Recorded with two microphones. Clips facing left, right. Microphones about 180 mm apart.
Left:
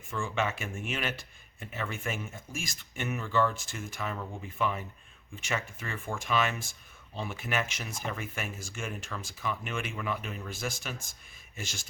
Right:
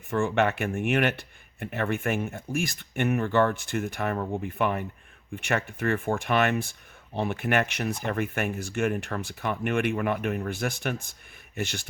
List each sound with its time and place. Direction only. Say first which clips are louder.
0.1 s speech: right 8 dB; 65° right (ahead or behind)